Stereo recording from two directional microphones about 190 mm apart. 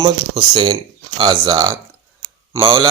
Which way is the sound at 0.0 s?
25° right (ahead or behind).